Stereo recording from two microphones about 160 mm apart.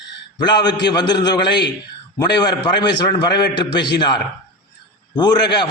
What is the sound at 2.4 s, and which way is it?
A man's voice, 25° left (ahead or behind).